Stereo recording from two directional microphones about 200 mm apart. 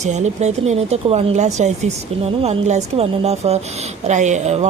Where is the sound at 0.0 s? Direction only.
35° right (ahead or behind).